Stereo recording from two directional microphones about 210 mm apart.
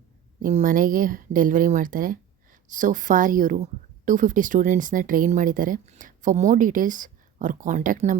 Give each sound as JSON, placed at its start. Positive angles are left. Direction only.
{"t": 0.4, "sound": "speech", "side_deg": -40}